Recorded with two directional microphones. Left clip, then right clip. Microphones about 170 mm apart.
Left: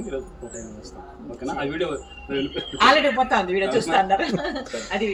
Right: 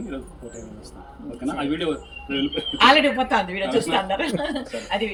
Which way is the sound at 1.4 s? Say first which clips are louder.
Right 1 dB; 15° left (ahead or behind).